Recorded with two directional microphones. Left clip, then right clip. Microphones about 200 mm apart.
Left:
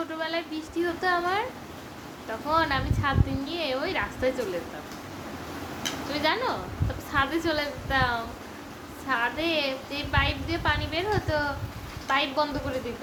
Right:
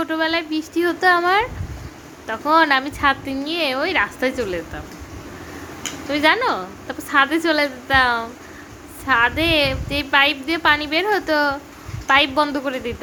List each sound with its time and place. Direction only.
0.1 s a woman's voice: 55° right (ahead or behind)
6.1 s a woman's voice: 50° right (ahead or behind)